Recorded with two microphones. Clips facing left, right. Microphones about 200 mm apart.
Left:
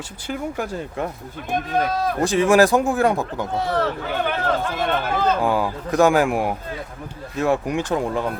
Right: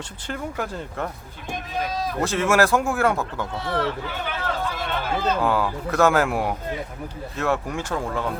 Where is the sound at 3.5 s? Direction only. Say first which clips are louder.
Left 4 dB; 45° left (ahead or behind).